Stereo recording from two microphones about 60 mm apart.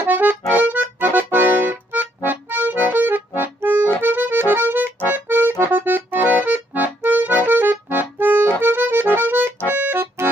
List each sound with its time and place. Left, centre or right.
0.0 s accordion: right
9.8 s music: right